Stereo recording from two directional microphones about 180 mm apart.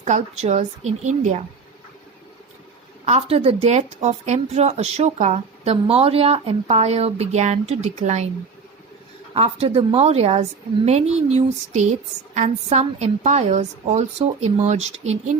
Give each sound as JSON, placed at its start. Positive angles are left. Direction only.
{"t": 0.0, "sound": "speech", "side_deg": -40}
{"t": 3.1, "sound": "speech", "side_deg": -35}
{"t": 9.3, "sound": "speech", "side_deg": -35}